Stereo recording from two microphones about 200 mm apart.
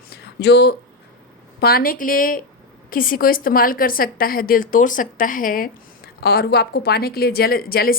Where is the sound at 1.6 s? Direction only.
45° left (ahead or behind).